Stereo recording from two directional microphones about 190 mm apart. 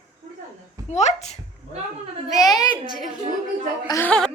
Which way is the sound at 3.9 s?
10° left (ahead or behind).